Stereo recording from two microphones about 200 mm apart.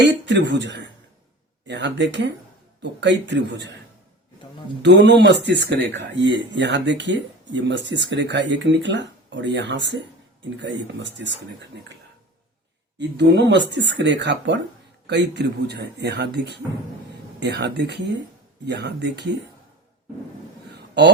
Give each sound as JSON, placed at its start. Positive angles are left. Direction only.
{"t": 0.1, "sound": "speech", "side_deg": -65}
{"t": 4.8, "sound": "speech", "side_deg": -60}
{"t": 13.0, "sound": "speech", "side_deg": -60}
{"t": 20.7, "sound": "a sound", "side_deg": -60}